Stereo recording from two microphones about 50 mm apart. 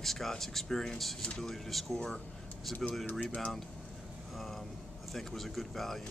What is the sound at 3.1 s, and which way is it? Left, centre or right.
Speech, left.